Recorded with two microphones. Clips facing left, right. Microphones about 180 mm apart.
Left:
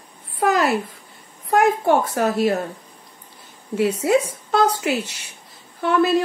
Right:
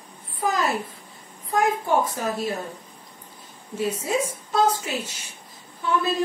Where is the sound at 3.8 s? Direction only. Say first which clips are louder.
Left 7 dB; 70° left (ahead or behind).